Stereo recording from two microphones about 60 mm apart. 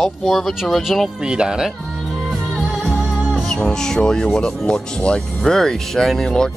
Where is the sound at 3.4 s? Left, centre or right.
Centre.